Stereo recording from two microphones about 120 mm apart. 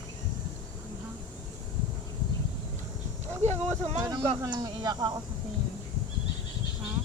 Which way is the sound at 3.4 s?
75° right (ahead or behind).